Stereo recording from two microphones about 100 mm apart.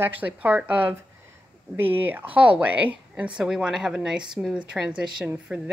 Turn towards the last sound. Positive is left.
turn(degrees=-10)  # may be behind; listen again after turning